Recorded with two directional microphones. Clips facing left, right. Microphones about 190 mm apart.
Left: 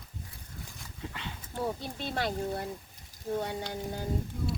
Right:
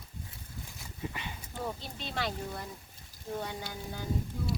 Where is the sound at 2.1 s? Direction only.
35° left (ahead or behind).